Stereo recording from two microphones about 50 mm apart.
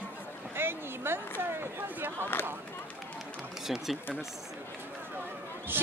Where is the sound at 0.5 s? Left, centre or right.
Right.